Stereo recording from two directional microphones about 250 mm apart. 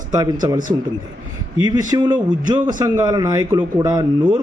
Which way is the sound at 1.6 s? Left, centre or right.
Centre.